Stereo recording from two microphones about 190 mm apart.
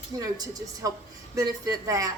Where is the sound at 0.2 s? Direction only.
20° right (ahead or behind).